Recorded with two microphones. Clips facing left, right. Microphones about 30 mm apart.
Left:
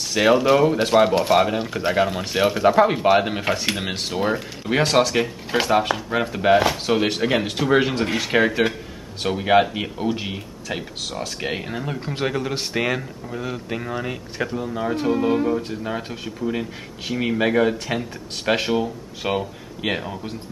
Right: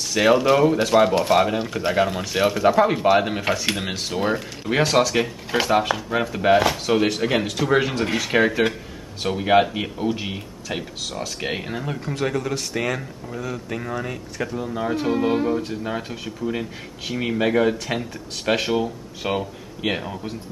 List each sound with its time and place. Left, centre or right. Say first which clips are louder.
0.2 s speech: even; centre
12.0 s speech: right 1 dB; left
12.3 s speech: left 1 dB; centre
14.6 s speech: right 1 dB; centre